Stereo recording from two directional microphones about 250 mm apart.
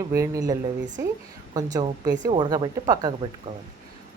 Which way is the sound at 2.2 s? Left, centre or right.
Centre.